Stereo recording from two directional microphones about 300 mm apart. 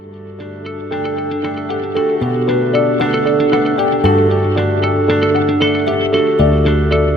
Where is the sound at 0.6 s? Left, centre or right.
Centre.